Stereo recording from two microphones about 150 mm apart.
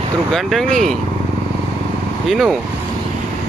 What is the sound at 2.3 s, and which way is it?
Speech, centre (ahead or behind).